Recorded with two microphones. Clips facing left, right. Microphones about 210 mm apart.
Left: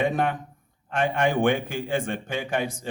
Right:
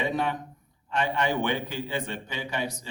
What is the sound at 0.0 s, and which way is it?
A man's voice, 50° left (ahead or behind).